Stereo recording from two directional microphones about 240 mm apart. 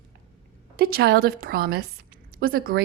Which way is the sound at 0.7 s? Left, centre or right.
Right.